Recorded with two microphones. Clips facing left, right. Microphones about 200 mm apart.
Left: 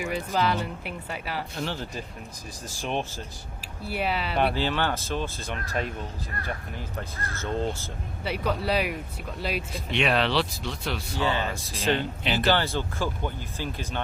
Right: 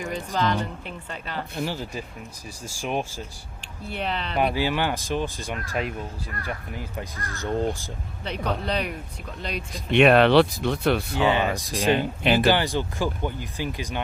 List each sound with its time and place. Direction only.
0.0 s speech: 10° left (ahead or behind)
1.5 s speech: 10° right (ahead or behind)
3.8 s speech: 5° left (ahead or behind)
4.4 s speech: 10° right (ahead or behind)
8.2 s speech: 5° left (ahead or behind)
9.9 s speech: 55° right (ahead or behind)
11.2 s speech: 15° right (ahead or behind)
12.2 s speech: 55° right (ahead or behind)
12.5 s speech: 15° right (ahead or behind)